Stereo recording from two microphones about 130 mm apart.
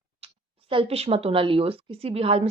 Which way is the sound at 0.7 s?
45° right (ahead or behind).